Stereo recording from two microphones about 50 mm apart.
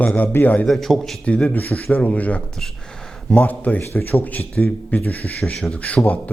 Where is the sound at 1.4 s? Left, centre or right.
Left.